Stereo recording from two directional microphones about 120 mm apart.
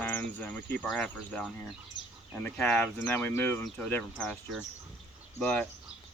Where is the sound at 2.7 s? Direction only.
20° left (ahead or behind).